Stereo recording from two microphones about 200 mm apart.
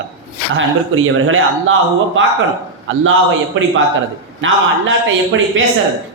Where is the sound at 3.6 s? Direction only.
70° right (ahead or behind).